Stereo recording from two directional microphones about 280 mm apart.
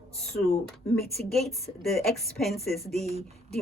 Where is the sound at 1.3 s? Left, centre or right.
Centre.